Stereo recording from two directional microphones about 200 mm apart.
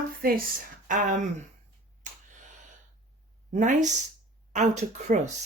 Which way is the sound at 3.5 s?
40° right (ahead or behind).